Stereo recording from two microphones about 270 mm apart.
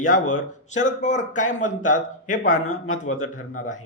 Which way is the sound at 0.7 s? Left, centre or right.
Left.